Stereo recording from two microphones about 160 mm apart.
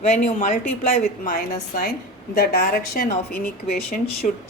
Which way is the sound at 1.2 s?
65° left (ahead or behind).